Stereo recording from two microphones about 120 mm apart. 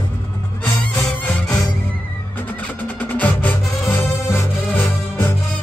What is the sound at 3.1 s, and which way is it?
Music, 15° left (ahead or behind).